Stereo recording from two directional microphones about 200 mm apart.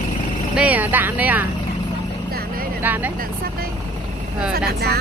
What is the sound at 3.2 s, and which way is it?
Vehicle, 50° right (ahead or behind).